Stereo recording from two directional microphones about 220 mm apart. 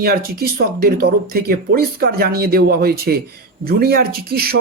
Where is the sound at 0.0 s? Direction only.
45° right (ahead or behind).